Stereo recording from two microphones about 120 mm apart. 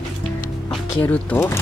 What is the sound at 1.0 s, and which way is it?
Speech, 20° left (ahead or behind).